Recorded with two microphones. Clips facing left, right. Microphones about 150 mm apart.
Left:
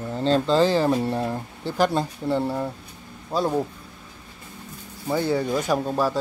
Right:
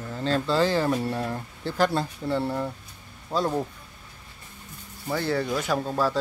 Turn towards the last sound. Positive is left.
turn(degrees=15)  # may be behind; listen again after turning